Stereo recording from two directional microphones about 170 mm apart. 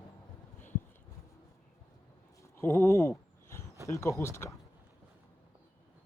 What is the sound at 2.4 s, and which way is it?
Speech, 15° left (ahead or behind).